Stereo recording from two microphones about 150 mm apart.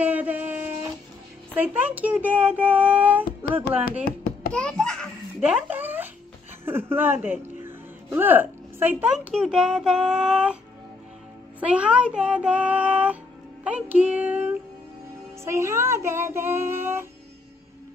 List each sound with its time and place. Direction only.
0.0 s a sound: 10° right (ahead or behind)
1.5 s a child's voice: 10° right (ahead or behind)
4.0 s a sound: 80° left
4.5 s a child's voice: 5° left (ahead or behind)
5.4 s a sound: 10° right (ahead or behind)
6.6 s speech: 15° right (ahead or behind)
11.6 s a child's voice: 10° right (ahead or behind)
13.7 s music: 10° right (ahead or behind)
15.4 s a child's voice: 20° right (ahead or behind)